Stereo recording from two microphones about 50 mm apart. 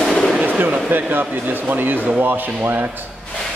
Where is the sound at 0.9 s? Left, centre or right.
Right.